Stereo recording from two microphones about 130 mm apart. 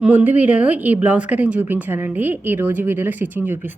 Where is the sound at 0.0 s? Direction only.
10° right (ahead or behind).